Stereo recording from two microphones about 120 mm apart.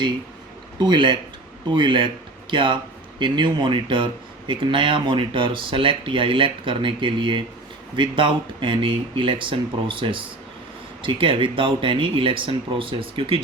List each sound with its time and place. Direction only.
0.8 s speech: 40° right (ahead or behind)